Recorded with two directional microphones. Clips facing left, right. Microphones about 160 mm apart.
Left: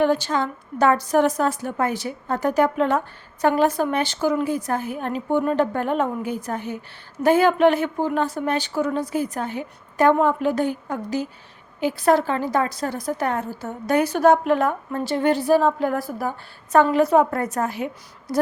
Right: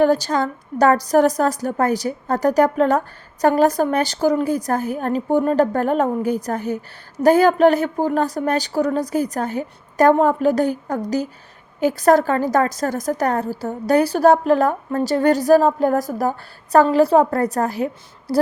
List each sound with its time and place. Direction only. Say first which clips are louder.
0.0 s a woman's voice: right 4 dB; 40° right (ahead or behind)